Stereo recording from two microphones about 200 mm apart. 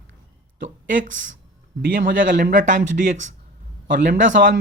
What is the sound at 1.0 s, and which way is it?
Speech, 40° right (ahead or behind).